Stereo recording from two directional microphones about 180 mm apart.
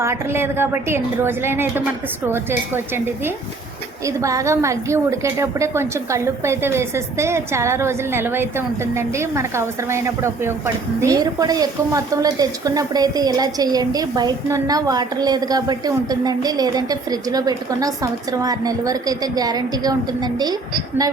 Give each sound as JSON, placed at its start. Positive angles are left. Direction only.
{"t": 0.0, "sound": "a woman's voice", "side_deg": -15}